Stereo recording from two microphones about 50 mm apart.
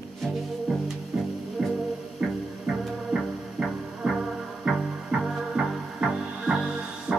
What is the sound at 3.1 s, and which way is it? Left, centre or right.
Music, right.